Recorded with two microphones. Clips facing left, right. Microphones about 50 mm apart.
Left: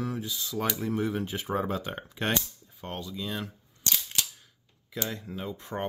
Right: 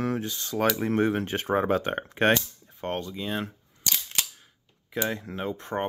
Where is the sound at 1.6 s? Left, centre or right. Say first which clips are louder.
Right 7 dB; right.